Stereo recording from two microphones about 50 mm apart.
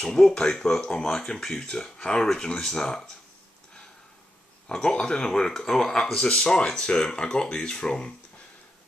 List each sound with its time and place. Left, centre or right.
0.0 s speech: centre
4.6 s speech: centre